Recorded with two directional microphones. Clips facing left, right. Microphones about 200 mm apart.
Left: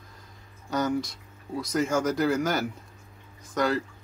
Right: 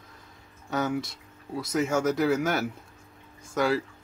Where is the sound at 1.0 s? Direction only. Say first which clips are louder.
Left 1 dB; 25° right (ahead or behind).